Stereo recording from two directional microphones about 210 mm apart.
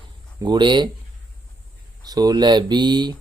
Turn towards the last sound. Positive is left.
turn(degrees=-20)  # may be behind; listen again after turning